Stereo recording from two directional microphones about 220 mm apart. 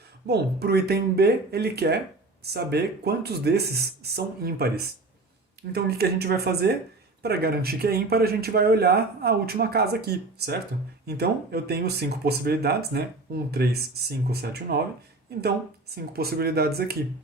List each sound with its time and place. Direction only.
0.3 s speech: 45° right (ahead or behind)